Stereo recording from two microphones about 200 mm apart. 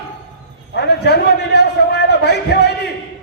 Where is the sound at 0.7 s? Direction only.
55° left (ahead or behind).